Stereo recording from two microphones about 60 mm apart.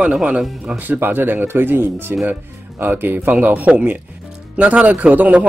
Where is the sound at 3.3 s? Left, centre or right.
Right.